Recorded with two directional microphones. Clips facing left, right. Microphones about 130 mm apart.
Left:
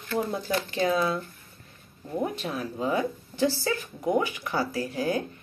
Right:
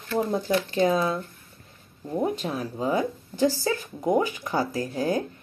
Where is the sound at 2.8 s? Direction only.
35° right (ahead or behind).